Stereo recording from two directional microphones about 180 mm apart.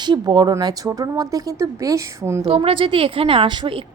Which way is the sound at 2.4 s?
30° right (ahead or behind).